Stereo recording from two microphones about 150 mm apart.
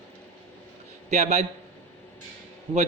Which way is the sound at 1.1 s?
50° right (ahead or behind).